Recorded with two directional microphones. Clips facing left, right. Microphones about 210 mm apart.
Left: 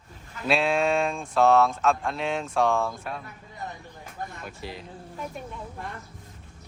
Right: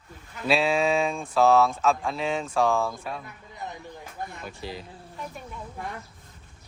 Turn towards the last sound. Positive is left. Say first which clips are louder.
# left 2 dB
turn(degrees=0)  # may be behind; listen again after turning